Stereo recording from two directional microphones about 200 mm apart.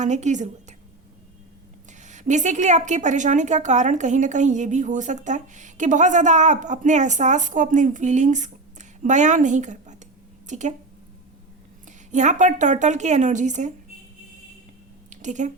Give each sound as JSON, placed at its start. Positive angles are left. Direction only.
{"t": 0.0, "sound": "speech", "side_deg": -35}
{"t": 1.9, "sound": "speech", "side_deg": -35}
{"t": 12.1, "sound": "speech", "side_deg": -35}
{"t": 15.1, "sound": "speech", "side_deg": -35}